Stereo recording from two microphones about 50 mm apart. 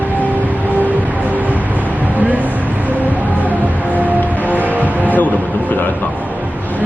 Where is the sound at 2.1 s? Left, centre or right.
Right.